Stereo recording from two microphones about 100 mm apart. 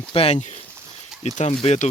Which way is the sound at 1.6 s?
90° left.